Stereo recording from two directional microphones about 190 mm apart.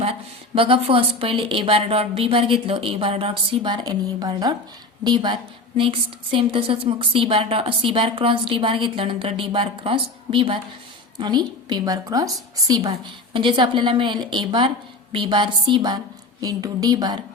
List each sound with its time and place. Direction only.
0.0 s a woman's voice: 30° right (ahead or behind)